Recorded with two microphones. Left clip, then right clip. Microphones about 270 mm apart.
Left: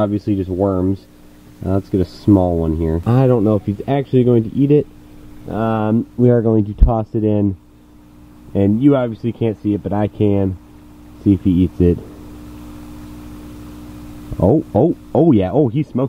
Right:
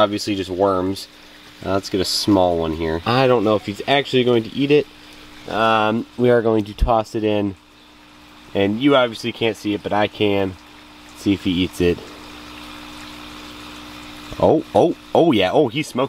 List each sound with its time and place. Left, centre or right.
0.0 s speech: centre
2.3 s speech: right
2.6 s speech: centre
8.5 s speech: centre
12.6 s a sound: centre
15.1 s speech: centre